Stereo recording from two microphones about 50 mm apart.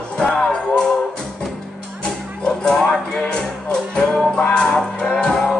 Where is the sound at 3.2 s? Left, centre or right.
Centre.